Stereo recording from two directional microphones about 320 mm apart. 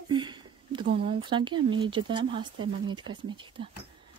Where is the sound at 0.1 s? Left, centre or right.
Centre.